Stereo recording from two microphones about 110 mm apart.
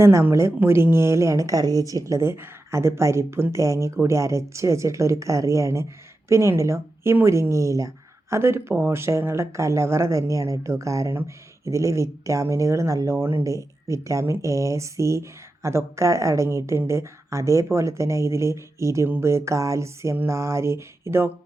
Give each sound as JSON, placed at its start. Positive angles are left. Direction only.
{"t": 0.0, "sound": "speech", "side_deg": -25}